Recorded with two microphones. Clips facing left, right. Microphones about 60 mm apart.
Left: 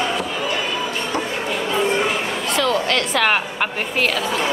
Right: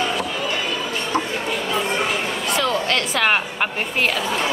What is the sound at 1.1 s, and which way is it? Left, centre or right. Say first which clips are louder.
Chatter: right 3 dB; right.